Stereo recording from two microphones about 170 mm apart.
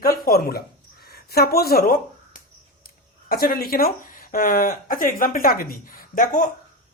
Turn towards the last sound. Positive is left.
turn(degrees=55)  # may be behind; listen again after turning